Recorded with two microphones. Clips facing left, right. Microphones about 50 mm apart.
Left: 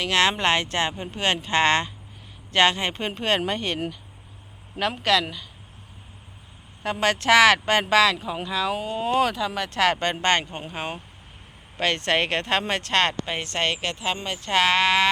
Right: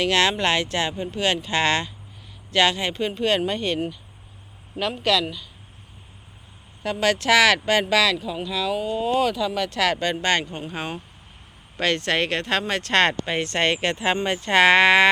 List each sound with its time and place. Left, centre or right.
0.1 s speech: left
3.1 s speech: left
4.8 s speech: left
6.8 s speech: left
10.3 s speech: left
10.7 s speech: centre
12.9 s speech: centre
13.6 s speech: centre
14.2 s speech: centre